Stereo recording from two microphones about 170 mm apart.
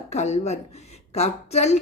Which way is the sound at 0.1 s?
40° left (ahead or behind).